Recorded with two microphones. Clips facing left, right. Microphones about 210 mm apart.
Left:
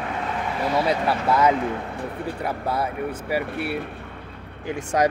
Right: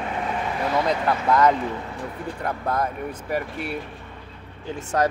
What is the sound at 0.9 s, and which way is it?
Speech, 5° left (ahead or behind).